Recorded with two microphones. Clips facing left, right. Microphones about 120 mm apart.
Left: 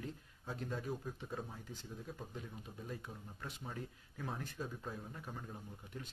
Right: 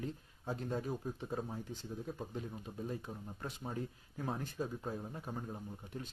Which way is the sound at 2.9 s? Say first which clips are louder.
Right 5 dB; 35° right (ahead or behind).